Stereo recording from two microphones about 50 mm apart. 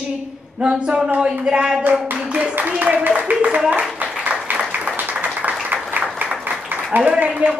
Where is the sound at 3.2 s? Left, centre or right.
Right.